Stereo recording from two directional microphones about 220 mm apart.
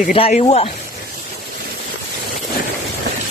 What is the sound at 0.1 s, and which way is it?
Speech, 30° left (ahead or behind).